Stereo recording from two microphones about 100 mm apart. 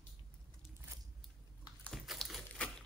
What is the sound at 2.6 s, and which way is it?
Typewriter, 10° left (ahead or behind).